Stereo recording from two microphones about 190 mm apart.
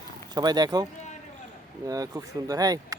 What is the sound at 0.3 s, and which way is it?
Speech, 20° right (ahead or behind).